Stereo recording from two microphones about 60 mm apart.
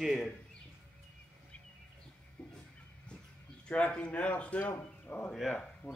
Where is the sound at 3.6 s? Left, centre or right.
Centre.